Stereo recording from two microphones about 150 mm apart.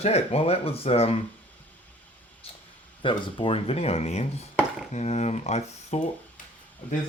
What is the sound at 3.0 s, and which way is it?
Speech, 35° left (ahead or behind).